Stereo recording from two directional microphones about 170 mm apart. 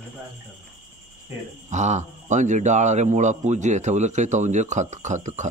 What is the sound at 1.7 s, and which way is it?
A man's voice, 45° right (ahead or behind).